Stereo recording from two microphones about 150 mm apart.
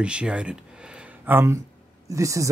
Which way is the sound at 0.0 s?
5° right (ahead or behind).